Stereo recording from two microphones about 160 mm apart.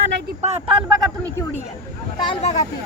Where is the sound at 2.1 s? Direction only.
30° left (ahead or behind).